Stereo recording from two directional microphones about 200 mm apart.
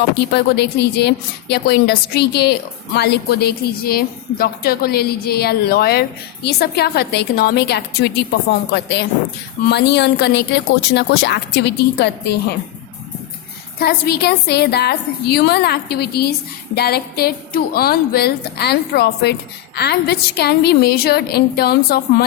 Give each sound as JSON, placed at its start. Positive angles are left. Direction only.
{"t": 0.1, "sound": "a woman's voice", "side_deg": 55}
{"t": 13.7, "sound": "a woman's voice", "side_deg": 50}